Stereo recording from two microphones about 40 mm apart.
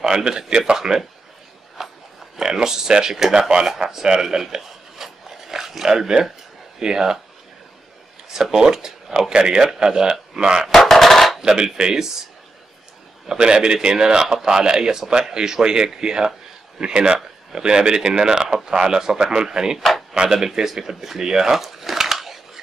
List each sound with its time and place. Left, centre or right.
0.0 s speech: centre
1.8 s a sound: centre
2.3 s speech: centre
4.6 s filing: centre
6.8 s speech: centre
8.3 s speech: centre
10.8 s a sound: centre
11.4 s speech: centre
13.3 s a man's voice: right; by 22.4 s centre